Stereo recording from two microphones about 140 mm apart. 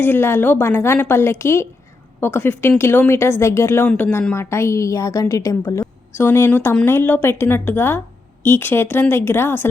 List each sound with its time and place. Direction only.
0.0 s a woman's voice: 15° left (ahead or behind)